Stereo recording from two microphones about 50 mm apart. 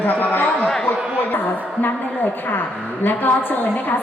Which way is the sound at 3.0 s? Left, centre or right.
Left.